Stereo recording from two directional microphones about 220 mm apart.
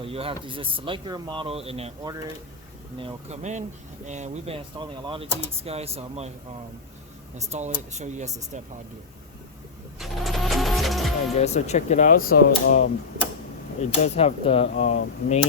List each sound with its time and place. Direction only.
0.0 s speech: 25° right (ahead or behind)
7.5 s speech: 30° right (ahead or behind)
10.0 s vehicle: centre (ahead or behind)
11.3 s speech: 30° left (ahead or behind)
14.0 s speech: 30° left (ahead or behind)